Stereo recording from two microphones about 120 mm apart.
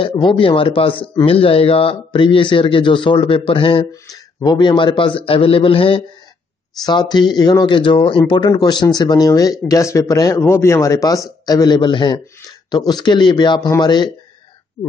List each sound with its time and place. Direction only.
0.1 s a man's voice: 45° left (ahead or behind)
3.9 s a man's voice: 35° left (ahead or behind); by 6.0 s 50° left (ahead or behind)
6.9 s speech: 40° left (ahead or behind)